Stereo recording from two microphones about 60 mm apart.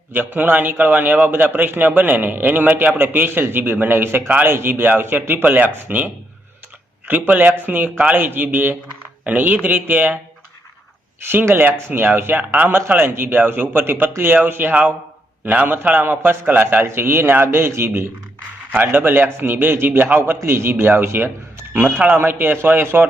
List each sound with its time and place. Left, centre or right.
0.1 s a man's voice: right
7.1 s a man's voice: right
11.3 s a man's voice: right
12.4 s a man's voice: right
12.9 s a man's voice: right
18.7 s a man's voice: right